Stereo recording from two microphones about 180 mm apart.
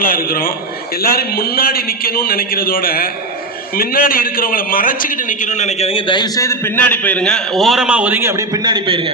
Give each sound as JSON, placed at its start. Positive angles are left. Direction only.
{"t": 0.0, "sound": "a man's voice", "side_deg": 55}
{"t": 5.5, "sound": "a man's voice", "side_deg": 40}